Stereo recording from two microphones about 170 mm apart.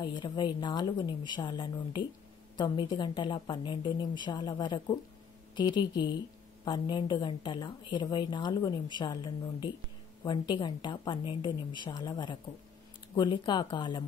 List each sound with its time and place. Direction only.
0.0 s a woman's voice: 25° left (ahead or behind)